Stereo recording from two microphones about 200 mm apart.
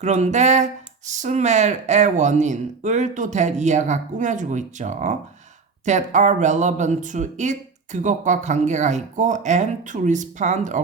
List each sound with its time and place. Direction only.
0.0 s speech: 35° right (ahead or behind)